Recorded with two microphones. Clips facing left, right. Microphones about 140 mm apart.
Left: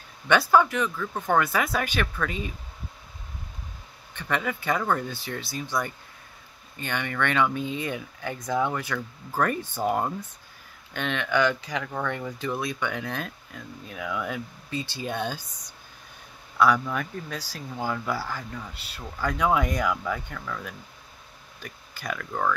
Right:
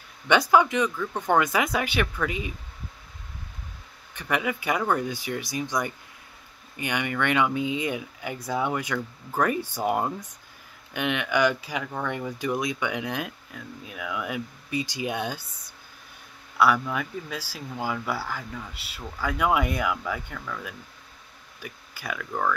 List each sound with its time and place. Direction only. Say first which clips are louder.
0.3 s speech: even; 15° right (ahead or behind)
4.1 s speech: right 1 dB; 10° right (ahead or behind)
13.5 s speech: even; centre (ahead or behind)
16.5 s speech: even; 5° right (ahead or behind)